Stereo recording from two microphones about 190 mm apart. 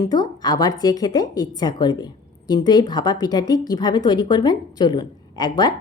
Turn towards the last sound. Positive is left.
turn(degrees=20)  # may be behind; listen again after turning